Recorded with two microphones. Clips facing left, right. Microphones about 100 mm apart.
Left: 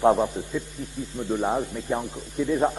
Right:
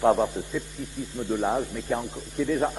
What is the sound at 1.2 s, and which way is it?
A man's voice, 15° left (ahead or behind).